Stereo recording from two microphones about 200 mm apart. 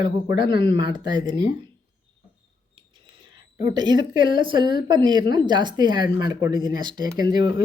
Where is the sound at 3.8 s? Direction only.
20° right (ahead or behind).